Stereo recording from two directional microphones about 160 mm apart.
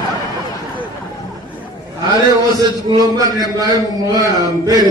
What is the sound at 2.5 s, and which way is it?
A man's voice, 20° right (ahead or behind).